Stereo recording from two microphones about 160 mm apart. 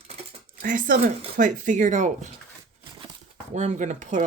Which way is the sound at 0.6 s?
55° right (ahead or behind).